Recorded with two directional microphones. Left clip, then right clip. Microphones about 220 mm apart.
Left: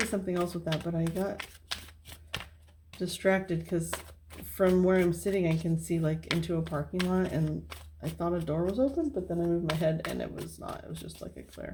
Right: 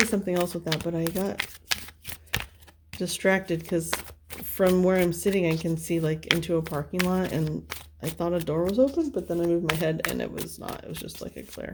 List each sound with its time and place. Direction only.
0.0 s speech: 45° right (ahead or behind)